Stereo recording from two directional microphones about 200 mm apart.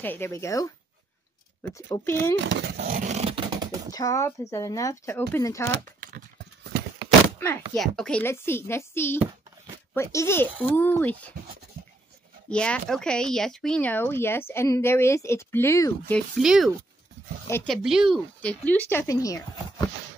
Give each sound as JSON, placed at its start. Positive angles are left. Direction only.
{"t": 0.0, "sound": "speech", "side_deg": 10}
{"t": 2.3, "sound": "dog", "side_deg": -65}
{"t": 3.9, "sound": "speech", "side_deg": 15}
{"t": 5.9, "sound": "horse", "side_deg": -45}
{"t": 7.7, "sound": "speech", "side_deg": 0}
{"t": 12.4, "sound": "speech", "side_deg": 5}
{"t": 16.1, "sound": "speech", "side_deg": 0}